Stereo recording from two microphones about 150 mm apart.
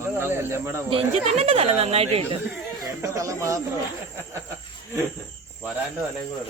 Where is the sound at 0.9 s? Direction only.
40° right (ahead or behind).